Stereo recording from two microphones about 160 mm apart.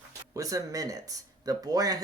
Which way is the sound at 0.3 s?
20° right (ahead or behind).